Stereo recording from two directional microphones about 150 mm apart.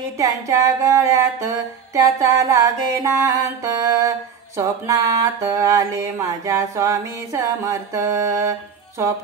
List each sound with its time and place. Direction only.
0.2 s music: 20° right (ahead or behind)